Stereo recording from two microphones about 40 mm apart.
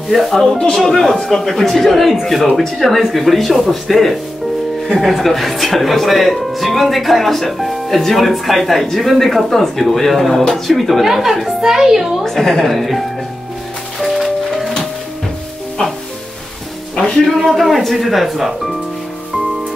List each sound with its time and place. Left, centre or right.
0.1 s speech: centre
1.1 s speech: centre
13.9 s music: centre
15.8 s sizzle: centre
16.9 s music: left
17.4 s speech: centre